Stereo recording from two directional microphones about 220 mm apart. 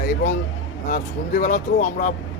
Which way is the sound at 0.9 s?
35° left (ahead or behind).